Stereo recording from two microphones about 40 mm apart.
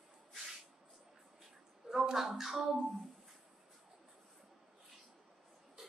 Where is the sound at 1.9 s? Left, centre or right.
Centre.